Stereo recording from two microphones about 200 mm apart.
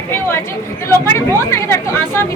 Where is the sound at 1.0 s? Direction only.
10° left (ahead or behind).